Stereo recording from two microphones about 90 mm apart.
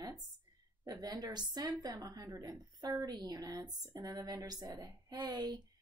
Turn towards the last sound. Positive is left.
turn(degrees=-50)  # may be behind; listen again after turning